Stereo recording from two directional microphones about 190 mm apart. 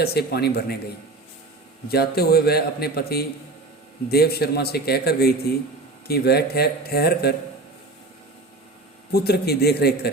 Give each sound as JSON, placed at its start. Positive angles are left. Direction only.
{"t": 0.0, "sound": "a man's voice", "side_deg": 55}
{"t": 1.9, "sound": "a man's voice", "side_deg": 55}
{"t": 9.1, "sound": "a man's voice", "side_deg": 55}